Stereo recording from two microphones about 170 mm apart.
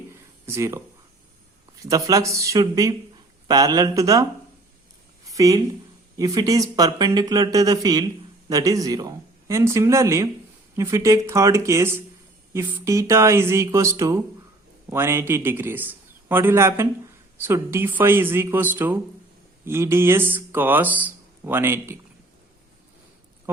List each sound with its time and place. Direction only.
0.4 s speech: 15° right (ahead or behind)
1.9 s speech: 20° right (ahead or behind)
5.2 s a sound: 20° right (ahead or behind)
6.1 s a man's voice: 20° right (ahead or behind)